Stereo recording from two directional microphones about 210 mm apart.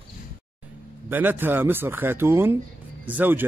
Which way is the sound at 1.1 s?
10° right (ahead or behind).